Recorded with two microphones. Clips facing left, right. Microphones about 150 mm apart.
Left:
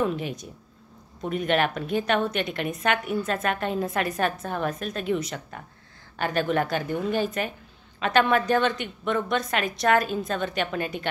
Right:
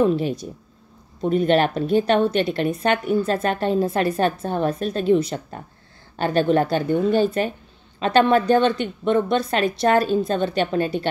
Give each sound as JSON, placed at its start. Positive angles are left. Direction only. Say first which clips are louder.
{"t": 0.0, "sound": "a woman's voice", "louder": "right 7 dB", "side_deg": -35}